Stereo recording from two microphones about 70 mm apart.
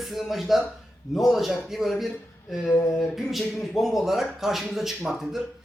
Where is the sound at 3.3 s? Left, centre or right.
Centre.